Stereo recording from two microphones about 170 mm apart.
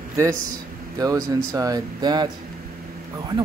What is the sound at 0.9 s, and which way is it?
Speech, 20° right (ahead or behind).